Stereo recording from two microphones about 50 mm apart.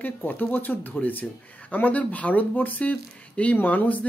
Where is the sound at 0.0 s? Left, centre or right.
Left.